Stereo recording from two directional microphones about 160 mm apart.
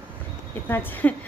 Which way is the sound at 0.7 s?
10° left (ahead or behind).